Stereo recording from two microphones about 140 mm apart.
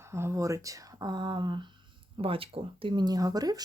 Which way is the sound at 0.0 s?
20° right (ahead or behind).